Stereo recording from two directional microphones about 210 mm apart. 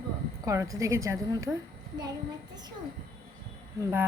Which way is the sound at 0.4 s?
15° right (ahead or behind).